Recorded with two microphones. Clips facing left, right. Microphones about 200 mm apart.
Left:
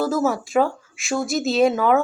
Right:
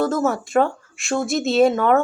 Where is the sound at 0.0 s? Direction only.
Centre (ahead or behind).